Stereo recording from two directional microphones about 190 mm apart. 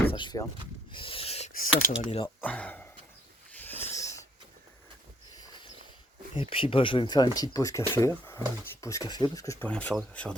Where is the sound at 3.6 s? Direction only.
10° left (ahead or behind).